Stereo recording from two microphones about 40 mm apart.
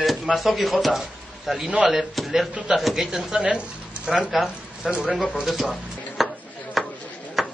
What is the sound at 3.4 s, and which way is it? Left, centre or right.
Speech, right.